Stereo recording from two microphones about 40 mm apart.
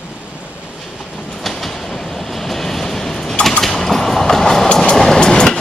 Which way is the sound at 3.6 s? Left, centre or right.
Centre.